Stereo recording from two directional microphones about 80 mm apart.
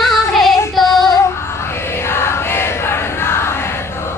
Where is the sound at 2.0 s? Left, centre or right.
Left.